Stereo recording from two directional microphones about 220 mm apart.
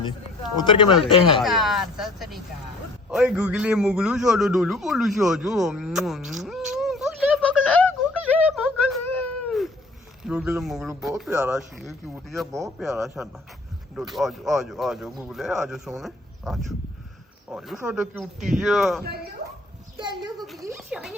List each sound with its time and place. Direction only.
0.5 s speech: 20° left (ahead or behind)
0.9 s a man's voice: centre (ahead or behind)
8.3 s a sound: 5° left (ahead or behind)
10.2 s speech: 5° right (ahead or behind)
12.5 s speech: 15° right (ahead or behind)
13.2 s speech: centre (ahead or behind)
19.0 s speech: 45° right (ahead or behind)
20.0 s a woman's voice: 20° right (ahead or behind); by 21.2 s 5° right (ahead or behind)